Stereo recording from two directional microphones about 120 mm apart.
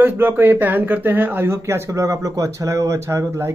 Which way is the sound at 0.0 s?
15° right (ahead or behind).